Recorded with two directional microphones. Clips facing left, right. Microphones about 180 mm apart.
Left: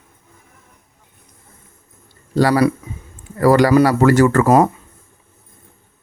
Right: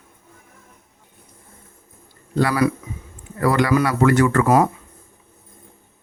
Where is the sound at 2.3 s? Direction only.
35° left (ahead or behind).